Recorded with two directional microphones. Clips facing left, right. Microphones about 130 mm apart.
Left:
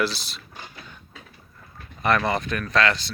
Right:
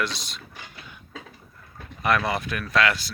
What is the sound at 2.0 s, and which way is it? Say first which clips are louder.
Speech: left 2 dB; 5° right (ahead or behind).